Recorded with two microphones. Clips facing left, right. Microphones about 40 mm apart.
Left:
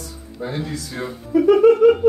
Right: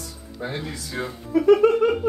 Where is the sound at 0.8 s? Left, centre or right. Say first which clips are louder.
Left 1 dB; centre.